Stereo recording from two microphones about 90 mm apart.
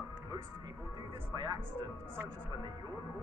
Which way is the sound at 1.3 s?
50° right (ahead or behind).